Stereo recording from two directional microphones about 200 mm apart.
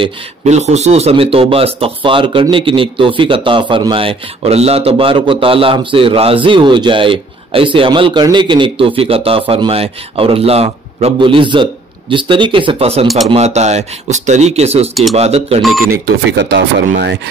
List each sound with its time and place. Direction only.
0.0 s speech: 35° right (ahead or behind)
13.0 s speech: centre (ahead or behind)
13.3 s speech: 35° right (ahead or behind)
15.9 s speech: 60° right (ahead or behind)